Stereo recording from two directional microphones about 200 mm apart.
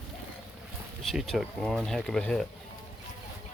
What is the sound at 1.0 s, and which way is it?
Speech, centre (ahead or behind).